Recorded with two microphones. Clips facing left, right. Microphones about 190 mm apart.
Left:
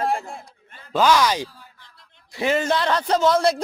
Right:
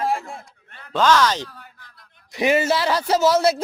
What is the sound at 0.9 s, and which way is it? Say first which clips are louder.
Speech: even; 10° left (ahead or behind).